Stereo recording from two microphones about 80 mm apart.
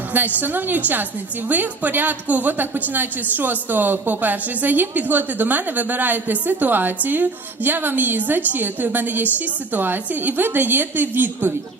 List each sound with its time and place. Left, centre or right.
0.1 s a woman's voice: right